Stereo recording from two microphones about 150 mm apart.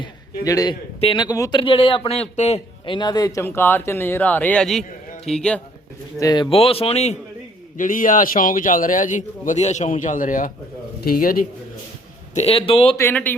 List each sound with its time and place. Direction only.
0.4 s a man's voice: 25° left (ahead or behind); by 2.6 s 45° left (ahead or behind)
2.8 s speech: 30° left (ahead or behind); by 5.6 s 5° left (ahead or behind)
6.1 s speech: 25° left (ahead or behind); by 7.2 s 45° left (ahead or behind)
7.8 s a man's voice: 65° left (ahead or behind)
11.0 s a man's voice: 75° left (ahead or behind)
12.3 s speech: 45° left (ahead or behind)
13.0 s speech: 15° left (ahead or behind)